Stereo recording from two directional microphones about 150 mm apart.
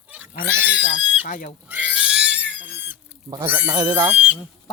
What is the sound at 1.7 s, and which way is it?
Pig, 10° right (ahead or behind).